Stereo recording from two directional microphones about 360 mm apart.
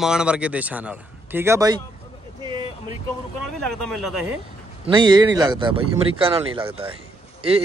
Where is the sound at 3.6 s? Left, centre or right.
Centre.